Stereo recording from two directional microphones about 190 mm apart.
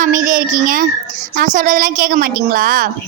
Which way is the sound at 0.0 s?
45° right (ahead or behind).